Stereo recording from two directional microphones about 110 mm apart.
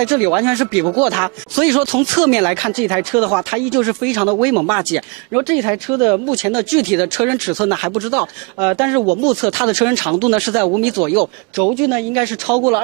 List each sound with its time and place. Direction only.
0.0 s speech: 10° right (ahead or behind)
6.3 s speech: 10° right (ahead or behind)